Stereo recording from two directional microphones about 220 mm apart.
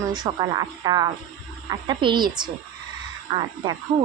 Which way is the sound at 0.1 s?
20° right (ahead or behind).